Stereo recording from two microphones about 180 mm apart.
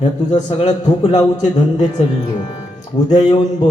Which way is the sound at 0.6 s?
35° left (ahead or behind).